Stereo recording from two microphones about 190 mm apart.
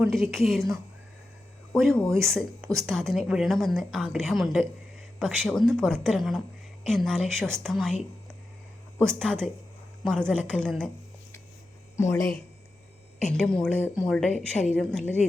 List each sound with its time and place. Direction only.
0.0 s a woman's voice: centre (ahead or behind)
1.7 s a woman's voice: 5° left (ahead or behind)
9.0 s a woman's voice: 5° left (ahead or behind)
11.9 s speech: 15° left (ahead or behind)
13.3 s a woman's voice: 5° left (ahead or behind)